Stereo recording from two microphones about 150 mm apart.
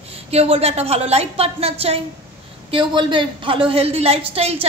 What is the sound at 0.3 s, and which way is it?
A woman's voice, 45° right (ahead or behind).